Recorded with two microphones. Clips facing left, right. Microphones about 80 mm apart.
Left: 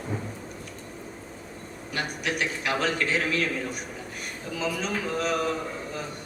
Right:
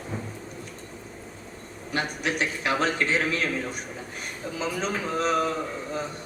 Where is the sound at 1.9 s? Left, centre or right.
Right.